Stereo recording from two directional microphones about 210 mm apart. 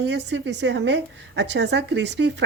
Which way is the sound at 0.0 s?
55° right (ahead or behind).